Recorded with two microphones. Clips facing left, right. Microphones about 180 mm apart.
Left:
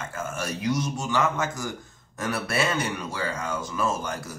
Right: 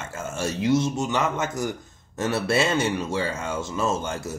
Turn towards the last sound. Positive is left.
turn(degrees=-25)  # may be behind; listen again after turning